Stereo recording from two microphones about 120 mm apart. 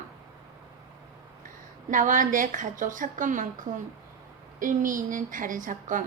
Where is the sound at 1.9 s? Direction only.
90° right.